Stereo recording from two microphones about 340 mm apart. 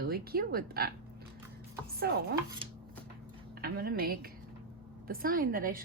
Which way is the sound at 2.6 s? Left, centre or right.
Centre.